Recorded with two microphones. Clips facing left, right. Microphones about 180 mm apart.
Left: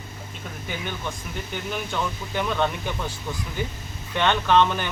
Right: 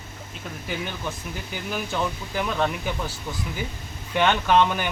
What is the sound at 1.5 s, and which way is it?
Speech, 5° right (ahead or behind).